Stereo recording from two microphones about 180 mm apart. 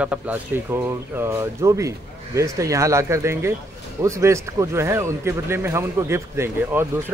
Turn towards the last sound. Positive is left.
turn(degrees=-15)  # may be behind; listen again after turning